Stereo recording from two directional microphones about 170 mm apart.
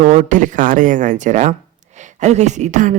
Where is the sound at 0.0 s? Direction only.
45° right (ahead or behind).